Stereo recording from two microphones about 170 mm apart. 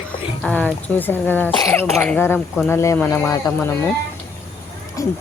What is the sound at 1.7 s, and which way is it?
A woman's voice, 10° left (ahead or behind).